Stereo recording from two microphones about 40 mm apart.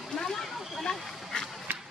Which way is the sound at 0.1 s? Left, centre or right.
Centre.